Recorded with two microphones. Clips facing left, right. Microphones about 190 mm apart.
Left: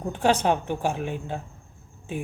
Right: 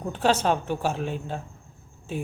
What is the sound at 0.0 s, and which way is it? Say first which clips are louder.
A woman's voice: left 1 dB; 15° left (ahead or behind).